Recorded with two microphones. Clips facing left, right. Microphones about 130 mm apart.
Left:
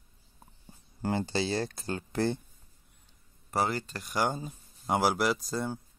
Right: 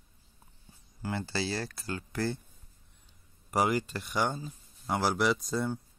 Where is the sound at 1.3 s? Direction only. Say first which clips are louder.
Left 3 dB; 20° left (ahead or behind).